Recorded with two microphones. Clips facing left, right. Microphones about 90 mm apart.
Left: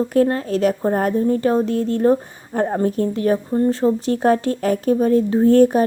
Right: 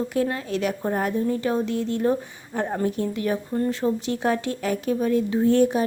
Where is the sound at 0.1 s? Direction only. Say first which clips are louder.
Left 7 dB; 45° left (ahead or behind).